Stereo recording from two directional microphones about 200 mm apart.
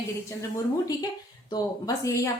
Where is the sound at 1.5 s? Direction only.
15° left (ahead or behind).